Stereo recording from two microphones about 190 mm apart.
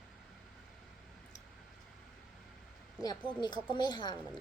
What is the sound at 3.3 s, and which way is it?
Speech, 25° left (ahead or behind).